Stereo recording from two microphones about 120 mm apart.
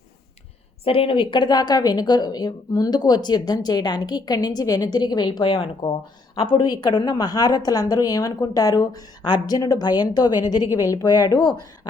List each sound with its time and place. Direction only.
0.9 s speech: 50° left (ahead or behind)